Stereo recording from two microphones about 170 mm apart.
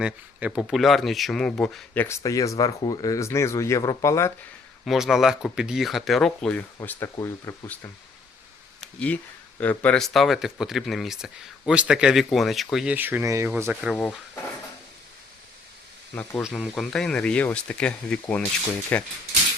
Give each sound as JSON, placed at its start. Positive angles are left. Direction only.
{"t": 0.0, "sound": "speech", "side_deg": -5}
{"t": 4.9, "sound": "speech", "side_deg": 0}
{"t": 9.6, "sound": "speech", "side_deg": 10}
{"t": 13.8, "sound": "speech", "side_deg": 0}
{"t": 16.4, "sound": "speech", "side_deg": -5}